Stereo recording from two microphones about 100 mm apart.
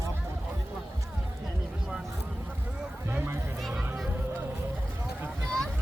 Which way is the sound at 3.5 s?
Centre (ahead or behind).